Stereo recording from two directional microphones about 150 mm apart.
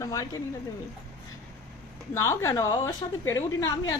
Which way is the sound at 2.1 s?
20° left (ahead or behind).